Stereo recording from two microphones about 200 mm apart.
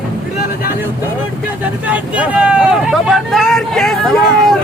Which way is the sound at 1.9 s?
5° right (ahead or behind).